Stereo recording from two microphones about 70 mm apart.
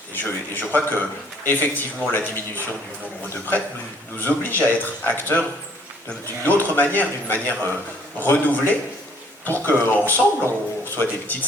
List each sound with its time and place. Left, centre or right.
0.3 s a man's voice: left
4.2 s a man's voice: left